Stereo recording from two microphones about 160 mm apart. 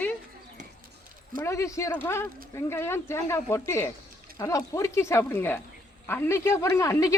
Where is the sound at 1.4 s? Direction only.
20° left (ahead or behind).